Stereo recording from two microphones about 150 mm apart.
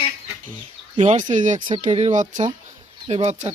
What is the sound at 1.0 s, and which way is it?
Speech, 55° right (ahead or behind).